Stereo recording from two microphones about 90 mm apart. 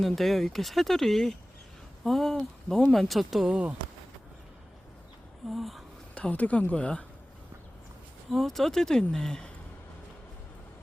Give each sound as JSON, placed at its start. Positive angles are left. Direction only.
{"t": 0.0, "sound": "speech", "side_deg": 0}
{"t": 5.5, "sound": "speech", "side_deg": 0}
{"t": 6.1, "sound": "speech", "side_deg": 15}
{"t": 8.3, "sound": "speech", "side_deg": 5}